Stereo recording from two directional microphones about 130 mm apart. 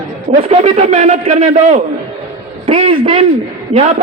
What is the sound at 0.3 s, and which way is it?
A man's voice, 50° right (ahead or behind).